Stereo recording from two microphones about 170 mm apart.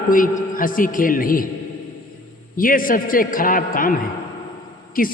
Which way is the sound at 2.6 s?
55° left (ahead or behind).